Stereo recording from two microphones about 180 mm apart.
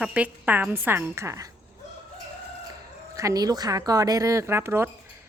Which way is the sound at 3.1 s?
20° right (ahead or behind).